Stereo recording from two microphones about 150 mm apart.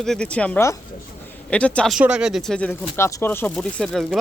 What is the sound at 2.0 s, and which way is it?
A man's voice, 5° right (ahead or behind).